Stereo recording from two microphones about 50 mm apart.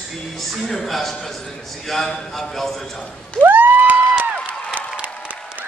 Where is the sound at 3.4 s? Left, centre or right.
Right.